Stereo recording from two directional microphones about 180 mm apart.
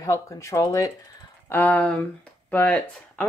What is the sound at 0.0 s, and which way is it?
Speech, 20° left (ahead or behind).